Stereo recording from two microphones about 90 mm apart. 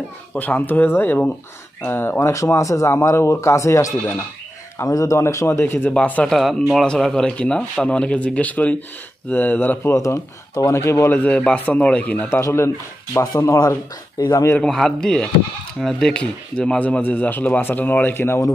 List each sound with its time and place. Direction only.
0.3 s speech: 15° left (ahead or behind)
6.3 s speech: centre (ahead or behind); by 9.9 s 20° left (ahead or behind)
9.9 s speech: 35° left (ahead or behind)
11.1 s speech: 15° left (ahead or behind)
12.4 s speech: 30° left (ahead or behind)
14.6 s speech: 5° left (ahead or behind); by 18.4 s 25° left (ahead or behind)